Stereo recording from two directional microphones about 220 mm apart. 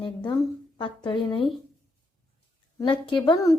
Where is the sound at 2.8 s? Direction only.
20° left (ahead or behind).